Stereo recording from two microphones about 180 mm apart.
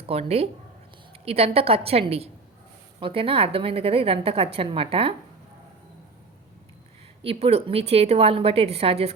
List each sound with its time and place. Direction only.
0.1 s a woman's voice: 35° right (ahead or behind)
7.2 s a woman's voice: 30° right (ahead or behind)